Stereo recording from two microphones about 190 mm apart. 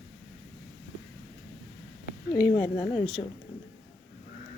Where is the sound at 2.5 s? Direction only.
20° left (ahead or behind).